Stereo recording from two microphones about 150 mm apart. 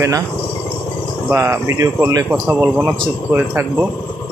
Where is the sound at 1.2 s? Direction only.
15° right (ahead or behind).